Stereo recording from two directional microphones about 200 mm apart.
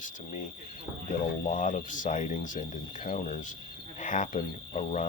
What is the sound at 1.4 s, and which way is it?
Speech, 40° left (ahead or behind).